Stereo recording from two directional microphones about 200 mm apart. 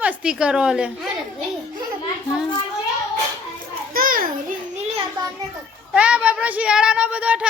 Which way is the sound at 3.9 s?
45° right (ahead or behind).